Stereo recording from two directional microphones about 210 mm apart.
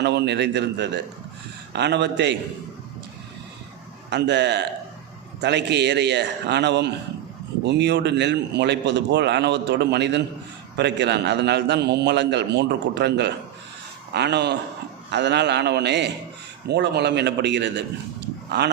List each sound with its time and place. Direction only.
0.0 s a man's voice: 55° right (ahead or behind)
4.1 s a man's voice: 55° right (ahead or behind)